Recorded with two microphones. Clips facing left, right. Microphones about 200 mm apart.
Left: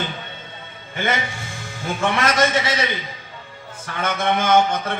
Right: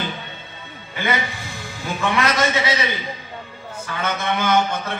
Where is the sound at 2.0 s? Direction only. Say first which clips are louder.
Left 1 dB; 50° left (ahead or behind).